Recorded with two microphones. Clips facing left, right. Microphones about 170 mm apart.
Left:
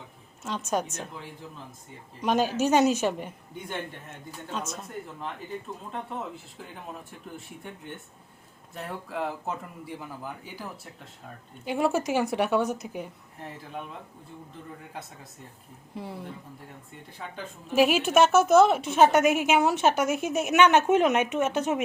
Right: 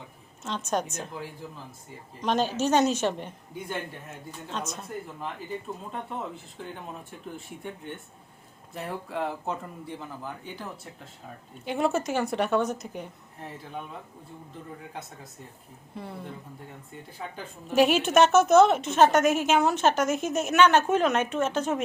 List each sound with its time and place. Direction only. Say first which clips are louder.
0.4 s a woman's voice: even; 5° left (ahead or behind)
2.2 s a woman's voice: left 1 dB; 10° left (ahead or behind)
8.7 s a man's voice: right 2 dB; centre (ahead or behind)
16.0 s a woman's voice: left 1 dB; 10° left (ahead or behind)
17.7 s a woman's voice: even; 5° left (ahead or behind)